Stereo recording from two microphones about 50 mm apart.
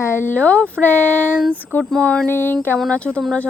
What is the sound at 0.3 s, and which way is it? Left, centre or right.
Speech, left.